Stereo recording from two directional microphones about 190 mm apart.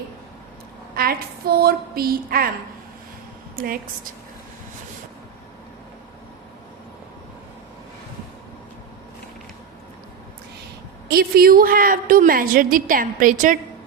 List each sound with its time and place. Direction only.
0.9 s a woman's voice: 55° right (ahead or behind)
3.5 s a woman's voice: 50° right (ahead or behind)
11.1 s a woman's voice: 50° right (ahead or behind)